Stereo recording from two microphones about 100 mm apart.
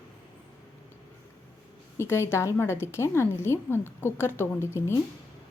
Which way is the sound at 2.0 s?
25° left (ahead or behind).